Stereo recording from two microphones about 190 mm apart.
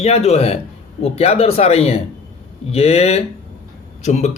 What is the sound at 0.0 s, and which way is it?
Speech, 35° left (ahead or behind).